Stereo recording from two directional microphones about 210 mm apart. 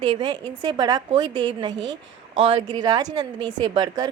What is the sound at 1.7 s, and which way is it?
Speech, 60° right (ahead or behind).